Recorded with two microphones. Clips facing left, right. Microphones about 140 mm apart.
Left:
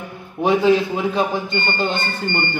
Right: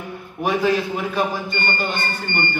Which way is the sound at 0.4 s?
25° left (ahead or behind).